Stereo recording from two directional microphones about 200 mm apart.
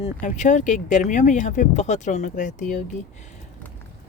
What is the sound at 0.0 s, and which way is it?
Speech, 40° left (ahead or behind).